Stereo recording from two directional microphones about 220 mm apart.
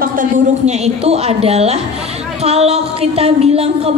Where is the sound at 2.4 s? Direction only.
25° right (ahead or behind).